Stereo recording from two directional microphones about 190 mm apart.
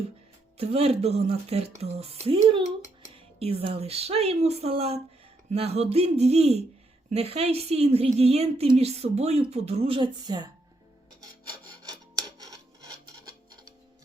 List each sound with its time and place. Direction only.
0.5 s a woman's voice: 30° right (ahead or behind)
11.9 s filing: 20° right (ahead or behind)